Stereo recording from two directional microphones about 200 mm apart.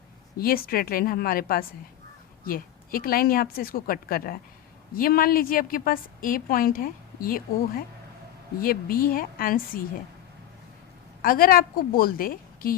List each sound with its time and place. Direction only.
0.3 s a woman's voice: 50° left (ahead or behind)
8.6 s a woman's voice: 45° left (ahead or behind)
11.2 s a woman's voice: 45° left (ahead or behind)